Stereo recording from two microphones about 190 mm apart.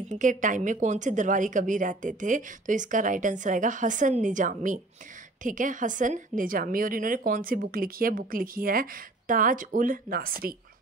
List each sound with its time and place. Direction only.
0.1 s a woman's voice: 40° right (ahead or behind)